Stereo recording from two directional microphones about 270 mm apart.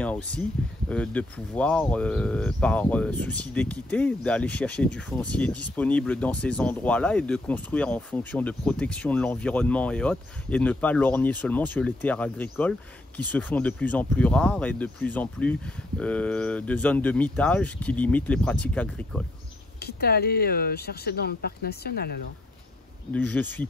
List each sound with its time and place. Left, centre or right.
0.0 s speech: centre
19.8 s speech: left
23.1 s speech: centre